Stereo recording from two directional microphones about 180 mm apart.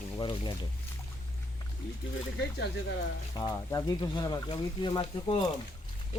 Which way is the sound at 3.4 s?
20° left (ahead or behind).